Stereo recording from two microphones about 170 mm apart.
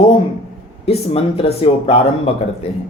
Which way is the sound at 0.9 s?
35° left (ahead or behind).